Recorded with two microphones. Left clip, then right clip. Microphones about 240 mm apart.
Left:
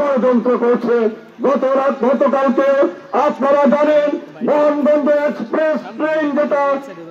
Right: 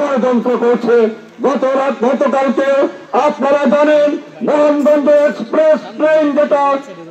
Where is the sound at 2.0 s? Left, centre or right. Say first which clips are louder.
Right 1 dB; right.